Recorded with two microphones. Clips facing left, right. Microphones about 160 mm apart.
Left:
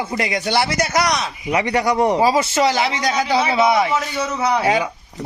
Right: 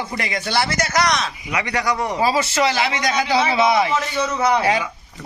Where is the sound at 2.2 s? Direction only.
15° left (ahead or behind).